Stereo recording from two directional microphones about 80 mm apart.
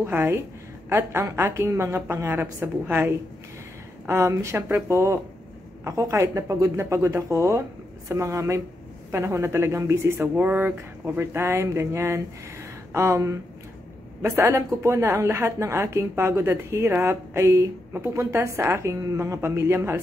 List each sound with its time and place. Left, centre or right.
0.0 s a woman's voice: right